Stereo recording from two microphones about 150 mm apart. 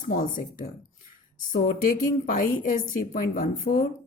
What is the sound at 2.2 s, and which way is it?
A woman's voice, 65° left (ahead or behind).